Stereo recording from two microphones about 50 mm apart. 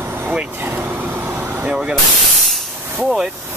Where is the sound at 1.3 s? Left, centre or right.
Right.